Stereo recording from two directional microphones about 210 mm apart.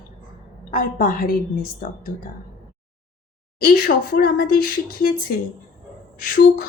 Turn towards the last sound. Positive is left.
turn(degrees=40)  # may be behind; listen again after turning